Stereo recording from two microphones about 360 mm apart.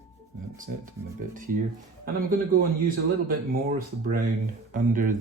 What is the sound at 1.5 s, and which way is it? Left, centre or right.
Speech, right.